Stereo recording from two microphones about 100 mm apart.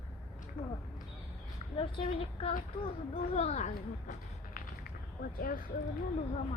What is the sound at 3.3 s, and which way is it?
Speech, 90° left.